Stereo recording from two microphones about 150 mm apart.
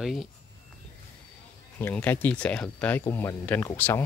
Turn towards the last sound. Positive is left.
turn(degrees=15)  # may be behind; listen again after turning